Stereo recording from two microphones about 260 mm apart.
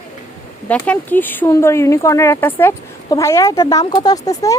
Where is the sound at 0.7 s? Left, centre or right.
Centre.